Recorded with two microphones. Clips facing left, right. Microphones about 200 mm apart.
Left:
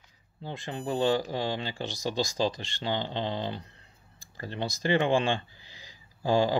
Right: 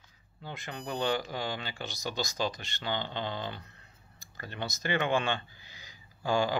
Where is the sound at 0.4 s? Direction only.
30° left (ahead or behind).